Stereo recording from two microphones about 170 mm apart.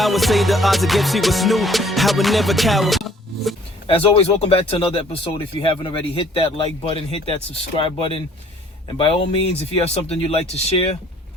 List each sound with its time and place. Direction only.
0.0 s music: centre (ahead or behind)
3.8 s speech: 30° left (ahead or behind)